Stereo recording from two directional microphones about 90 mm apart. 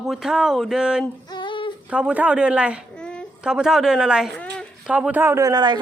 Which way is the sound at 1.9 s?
15° right (ahead or behind).